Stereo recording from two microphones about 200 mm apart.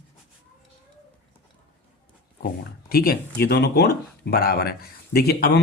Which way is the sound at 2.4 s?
50° left (ahead or behind).